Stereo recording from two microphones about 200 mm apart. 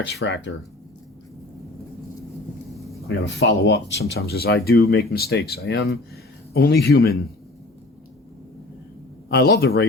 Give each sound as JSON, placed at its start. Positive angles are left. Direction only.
{"t": 0.1, "sound": "speech", "side_deg": 60}
{"t": 3.1, "sound": "speech", "side_deg": 65}
{"t": 9.3, "sound": "speech", "side_deg": 55}